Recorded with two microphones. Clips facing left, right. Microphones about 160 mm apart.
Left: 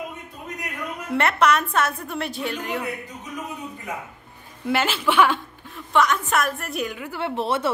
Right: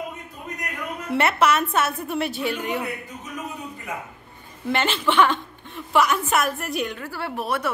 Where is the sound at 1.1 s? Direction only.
5° right (ahead or behind).